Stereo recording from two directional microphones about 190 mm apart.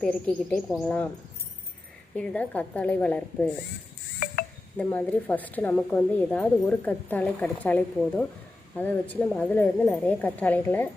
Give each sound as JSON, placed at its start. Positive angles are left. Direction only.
{"t": 0.0, "sound": "speech", "side_deg": 5}
{"t": 2.1, "sound": "speech", "side_deg": 5}
{"t": 4.8, "sound": "speech", "side_deg": 10}